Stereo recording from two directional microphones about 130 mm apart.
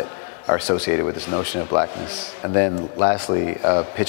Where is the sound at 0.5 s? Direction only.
25° left (ahead or behind).